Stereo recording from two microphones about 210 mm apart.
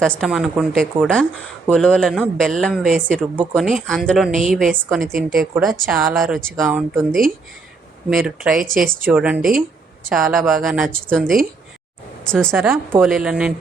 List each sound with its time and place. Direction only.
0.0 s speech: centre (ahead or behind)
5.0 s a woman's voice: 40° right (ahead or behind)
5.4 s speech: centre (ahead or behind)
12.5 s speech: 10° right (ahead or behind)